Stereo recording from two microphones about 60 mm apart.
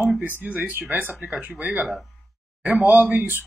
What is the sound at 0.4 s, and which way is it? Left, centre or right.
Speech, right.